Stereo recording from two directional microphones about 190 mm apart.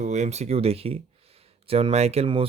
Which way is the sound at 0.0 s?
35° right (ahead or behind).